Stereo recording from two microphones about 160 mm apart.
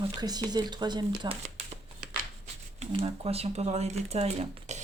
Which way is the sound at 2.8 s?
35° right (ahead or behind).